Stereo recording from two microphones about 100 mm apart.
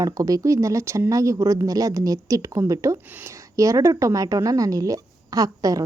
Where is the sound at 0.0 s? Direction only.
35° right (ahead or behind).